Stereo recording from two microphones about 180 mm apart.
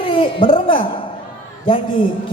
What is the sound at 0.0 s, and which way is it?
A man's voice, 30° left (ahead or behind).